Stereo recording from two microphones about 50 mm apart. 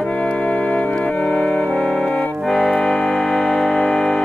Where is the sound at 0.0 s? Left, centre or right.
Centre.